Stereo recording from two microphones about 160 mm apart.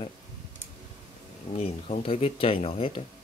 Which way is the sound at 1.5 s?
40° left (ahead or behind).